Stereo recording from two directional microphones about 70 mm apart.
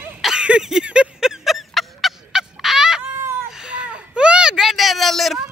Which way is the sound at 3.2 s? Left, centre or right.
Right.